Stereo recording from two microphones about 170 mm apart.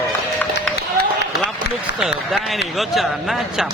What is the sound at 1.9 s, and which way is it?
A man's voice, 5° right (ahead or behind).